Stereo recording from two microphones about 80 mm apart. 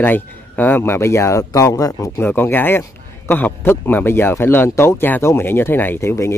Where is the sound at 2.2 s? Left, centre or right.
Left.